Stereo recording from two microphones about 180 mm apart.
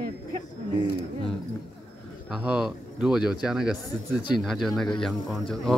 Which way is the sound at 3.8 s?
25° left (ahead or behind).